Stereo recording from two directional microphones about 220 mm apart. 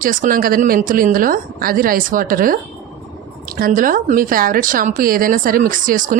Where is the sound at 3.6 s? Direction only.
40° right (ahead or behind).